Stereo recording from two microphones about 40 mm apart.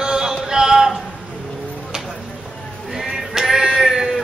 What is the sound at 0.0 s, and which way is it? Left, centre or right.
Music, centre.